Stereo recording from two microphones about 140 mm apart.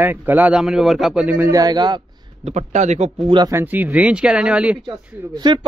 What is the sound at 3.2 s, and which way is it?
Speech, 35° right (ahead or behind).